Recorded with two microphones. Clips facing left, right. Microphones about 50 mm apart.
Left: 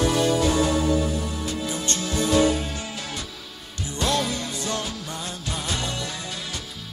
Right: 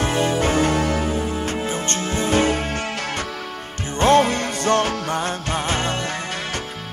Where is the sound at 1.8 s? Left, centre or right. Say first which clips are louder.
Right 3 dB; right.